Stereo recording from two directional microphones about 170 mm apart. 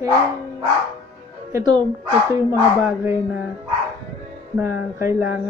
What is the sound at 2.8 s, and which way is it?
Speech, 10° right (ahead or behind).